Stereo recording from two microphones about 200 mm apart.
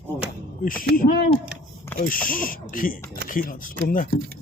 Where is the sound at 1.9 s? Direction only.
10° left (ahead or behind).